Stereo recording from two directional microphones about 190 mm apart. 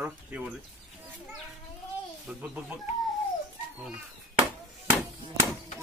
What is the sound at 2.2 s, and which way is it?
Speech, 5° right (ahead or behind).